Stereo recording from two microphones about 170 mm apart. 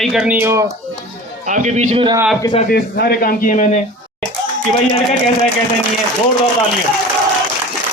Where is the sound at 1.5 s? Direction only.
45° right (ahead or behind).